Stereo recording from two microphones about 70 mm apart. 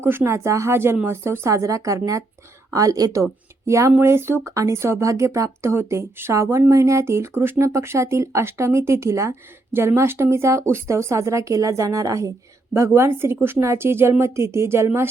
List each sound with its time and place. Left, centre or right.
0.0 s speech: right
4.4 s speech: right
12.7 s speech: right